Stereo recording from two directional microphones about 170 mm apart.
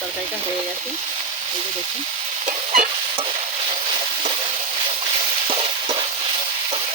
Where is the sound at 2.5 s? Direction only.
45° right (ahead or behind).